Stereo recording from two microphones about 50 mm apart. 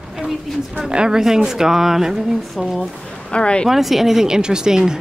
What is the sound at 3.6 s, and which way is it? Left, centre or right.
Speech, centre.